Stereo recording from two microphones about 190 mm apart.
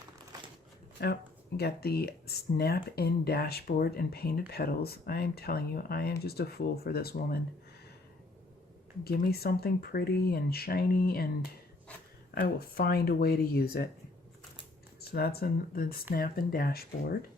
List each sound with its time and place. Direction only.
1.0 s speech: 60° left (ahead or behind)
9.0 s speech: 55° left (ahead or behind)
12.3 s speech: 55° left (ahead or behind)
15.1 s speech: 55° left (ahead or behind)